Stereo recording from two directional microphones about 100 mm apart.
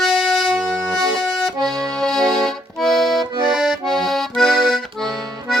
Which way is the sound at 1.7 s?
35° right (ahead or behind).